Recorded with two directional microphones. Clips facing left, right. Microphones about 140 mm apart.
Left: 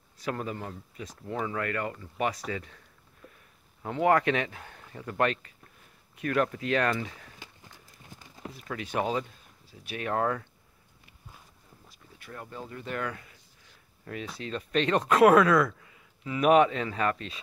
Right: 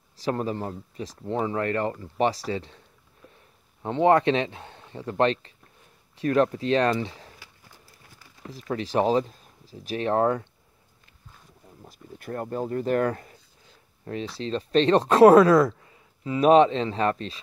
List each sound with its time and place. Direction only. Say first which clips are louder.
0.2 s speech: right 6 dB; 30° right (ahead or behind)
3.8 s speech: right 5 dB; 25° right (ahead or behind)
7.3 s horse: left 2 dB; 20° left (ahead or behind)
8.5 s speech: right 7 dB; 35° right (ahead or behind)
11.8 s speech: right 13 dB; 45° right (ahead or behind); by 17.4 s 30° right (ahead or behind)